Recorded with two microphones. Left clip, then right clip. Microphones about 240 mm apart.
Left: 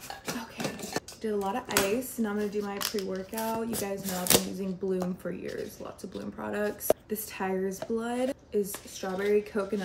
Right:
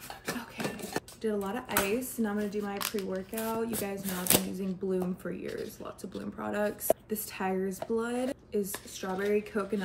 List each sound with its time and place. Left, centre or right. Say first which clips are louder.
0.3 s speech: even; centre